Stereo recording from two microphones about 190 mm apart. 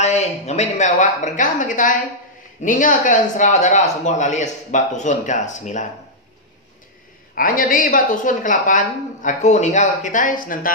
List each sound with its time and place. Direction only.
0.0 s speech: 35° left (ahead or behind)
7.3 s a woman's voice: 45° left (ahead or behind)